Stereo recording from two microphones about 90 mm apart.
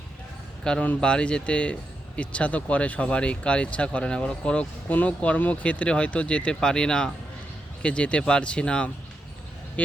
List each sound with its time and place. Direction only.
0.6 s speech: 10° left (ahead or behind)